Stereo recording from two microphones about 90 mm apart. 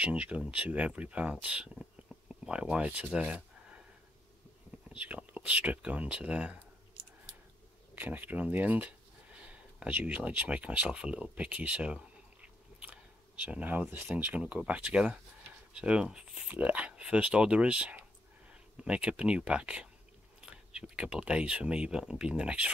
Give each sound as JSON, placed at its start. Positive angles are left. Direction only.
{"t": 0.0, "sound": "speech", "side_deg": -15}
{"t": 2.2, "sound": "a sound", "side_deg": -10}
{"t": 4.8, "sound": "speech", "side_deg": -15}
{"t": 7.9, "sound": "speech", "side_deg": -20}